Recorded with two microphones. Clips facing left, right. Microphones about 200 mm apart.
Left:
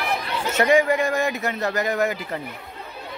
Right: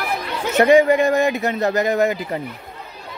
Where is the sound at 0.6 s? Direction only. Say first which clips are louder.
Right 6 dB; 25° right (ahead or behind).